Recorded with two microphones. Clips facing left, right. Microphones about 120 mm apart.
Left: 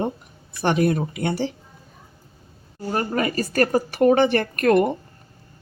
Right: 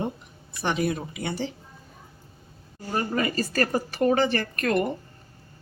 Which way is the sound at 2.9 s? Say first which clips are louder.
Left 3 dB; 60° left (ahead or behind).